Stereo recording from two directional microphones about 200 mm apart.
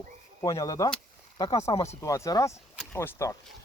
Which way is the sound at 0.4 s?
20° left (ahead or behind).